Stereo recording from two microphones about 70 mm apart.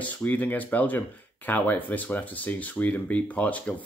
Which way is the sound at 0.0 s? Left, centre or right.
Left.